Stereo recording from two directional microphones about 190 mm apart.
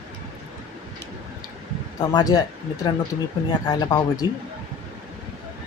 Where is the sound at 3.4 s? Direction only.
20° left (ahead or behind).